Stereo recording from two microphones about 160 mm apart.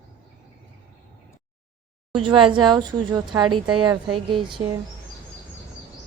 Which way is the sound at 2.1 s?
30° right (ahead or behind).